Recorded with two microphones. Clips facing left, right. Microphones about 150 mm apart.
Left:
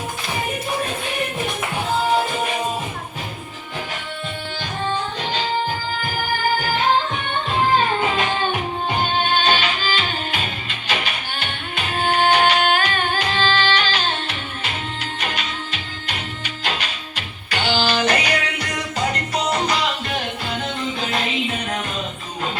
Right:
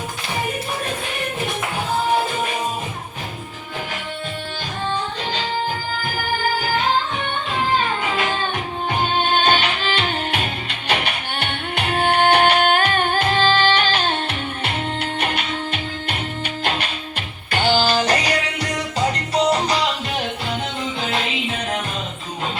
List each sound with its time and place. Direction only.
9.4 s music: 55° right (ahead or behind); by 19.7 s 35° right (ahead or behind)